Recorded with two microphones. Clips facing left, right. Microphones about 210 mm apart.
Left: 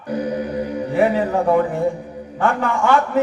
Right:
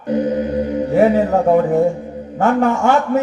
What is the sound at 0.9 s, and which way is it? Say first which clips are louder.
A man's voice: right 4 dB; 45° right (ahead or behind).